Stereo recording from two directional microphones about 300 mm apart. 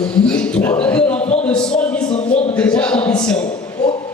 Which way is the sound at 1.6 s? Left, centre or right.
Centre.